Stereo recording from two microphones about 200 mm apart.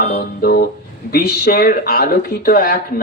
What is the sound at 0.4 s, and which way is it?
Speech, 50° left (ahead or behind).